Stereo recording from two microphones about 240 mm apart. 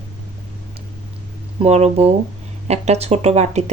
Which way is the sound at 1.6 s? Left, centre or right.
Right.